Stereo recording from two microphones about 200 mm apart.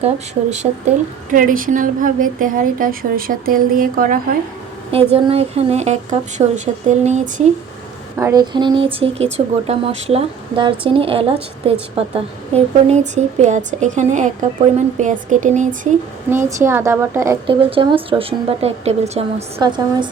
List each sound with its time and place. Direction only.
0.5 s a woman's voice: 35° right (ahead or behind)
4.9 s a woman's voice: 30° right (ahead or behind)
8.2 s a woman's voice: 20° right (ahead or behind); by 15.9 s 40° right (ahead or behind)
16.6 s a woman's voice: 15° right (ahead or behind)
17.4 s speech: 25° right (ahead or behind)
19.5 s speech: 20° right (ahead or behind)